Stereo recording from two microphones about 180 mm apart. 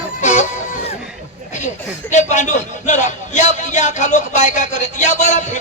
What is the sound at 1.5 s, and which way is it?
Speech, 40° left (ahead or behind).